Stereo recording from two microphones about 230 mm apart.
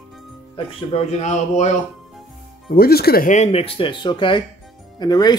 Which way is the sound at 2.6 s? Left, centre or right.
Left.